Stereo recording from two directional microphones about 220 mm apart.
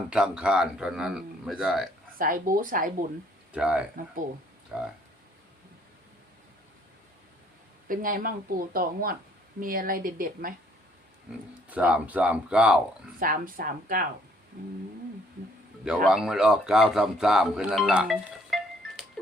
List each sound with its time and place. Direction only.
0.1 s a man's voice: 5° right (ahead or behind)
2.1 s speech: 40° right (ahead or behind)
3.5 s a man's voice: 5° right (ahead or behind)
7.9 s speech: 40° right (ahead or behind)
11.7 s a man's voice: 5° right (ahead or behind)
13.1 s speech: 40° right (ahead or behind)
16.0 s speech: centre (ahead or behind)